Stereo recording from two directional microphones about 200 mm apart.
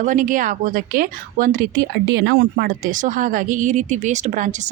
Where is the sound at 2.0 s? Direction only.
60° right (ahead or behind).